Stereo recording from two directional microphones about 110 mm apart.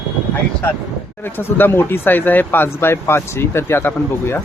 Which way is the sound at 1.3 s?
20° left (ahead or behind).